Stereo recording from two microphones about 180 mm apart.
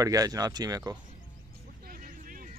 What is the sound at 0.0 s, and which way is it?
Speech, 20° right (ahead or behind).